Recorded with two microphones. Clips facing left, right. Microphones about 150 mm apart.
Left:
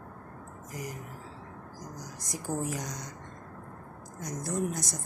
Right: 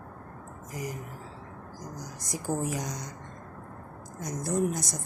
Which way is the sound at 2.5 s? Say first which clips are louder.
Right 2 dB; 30° right (ahead or behind).